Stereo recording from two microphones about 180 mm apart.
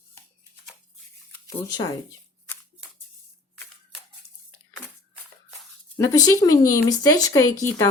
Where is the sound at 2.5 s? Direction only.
10° left (ahead or behind).